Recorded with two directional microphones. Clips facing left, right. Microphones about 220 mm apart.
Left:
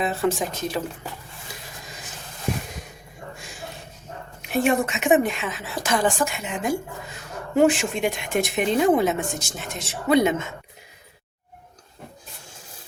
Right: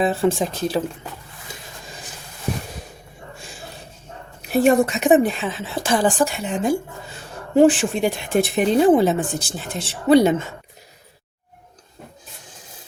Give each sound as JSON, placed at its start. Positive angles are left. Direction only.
{"t": 0.0, "sound": "speech", "side_deg": -30}
{"t": 1.5, "sound": "a sound", "side_deg": -25}
{"t": 4.4, "sound": "speech", "side_deg": -40}